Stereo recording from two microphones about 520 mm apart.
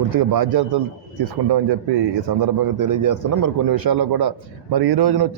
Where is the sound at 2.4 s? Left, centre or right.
Right.